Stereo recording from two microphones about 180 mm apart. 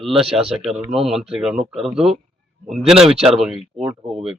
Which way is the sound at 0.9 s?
Centre (ahead or behind).